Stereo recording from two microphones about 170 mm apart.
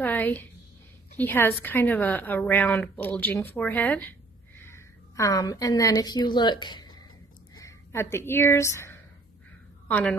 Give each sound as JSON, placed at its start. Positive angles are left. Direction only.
{"t": 0.0, "sound": "a woman's voice", "side_deg": 10}